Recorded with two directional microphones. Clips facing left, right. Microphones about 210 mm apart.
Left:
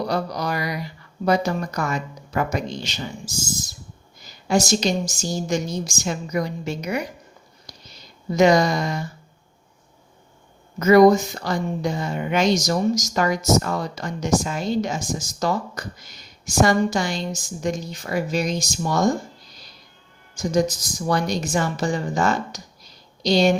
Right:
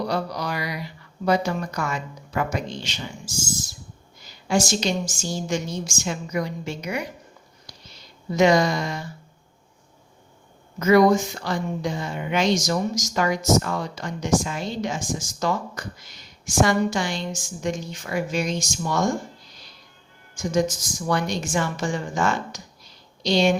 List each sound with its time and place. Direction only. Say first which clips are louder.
0.1 s mantra: left 2 dB; 45° left (ahead or behind)
1.2 s a woman's voice: left 2 dB; 40° left (ahead or behind)
4.4 s a woman's voice: left 2 dB; 40° left (ahead or behind)
7.7 s a sound: left 2 dB; 40° left (ahead or behind)
8.4 s a woman's voice: left 2 dB; 40° left (ahead or behind)
10.8 s a woman's voice: left 3 dB; 40° left (ahead or behind)
20.3 s a woman's voice: left 2 dB; 35° left (ahead or behind)